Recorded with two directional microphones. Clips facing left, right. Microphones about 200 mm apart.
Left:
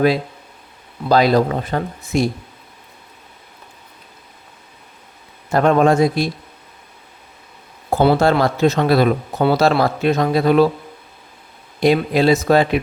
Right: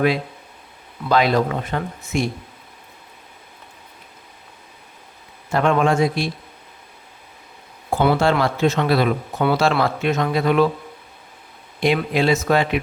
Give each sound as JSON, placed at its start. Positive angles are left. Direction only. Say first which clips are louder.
{"t": 1.0, "sound": "speech", "louder": "left 4 dB", "side_deg": 35}
{"t": 5.5, "sound": "speech", "louder": "left 4 dB", "side_deg": 40}
{"t": 7.9, "sound": "speech", "louder": "left 3 dB", "side_deg": 40}
{"t": 11.8, "sound": "speech", "louder": "left 4 dB", "side_deg": 40}